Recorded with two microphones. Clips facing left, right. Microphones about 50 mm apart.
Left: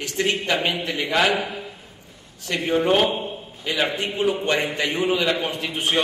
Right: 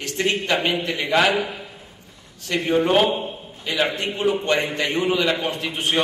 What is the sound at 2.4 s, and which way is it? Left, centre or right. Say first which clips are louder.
A man's voice: right 1 dB; centre.